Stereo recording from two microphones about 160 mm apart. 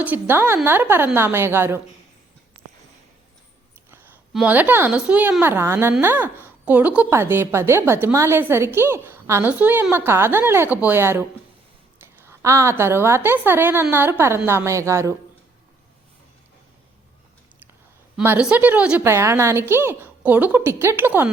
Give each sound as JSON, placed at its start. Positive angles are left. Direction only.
{"t": 0.0, "sound": "a woman's voice", "side_deg": -10}
{"t": 4.3, "sound": "a woman's voice", "side_deg": -5}
{"t": 18.2, "sound": "a woman's voice", "side_deg": -10}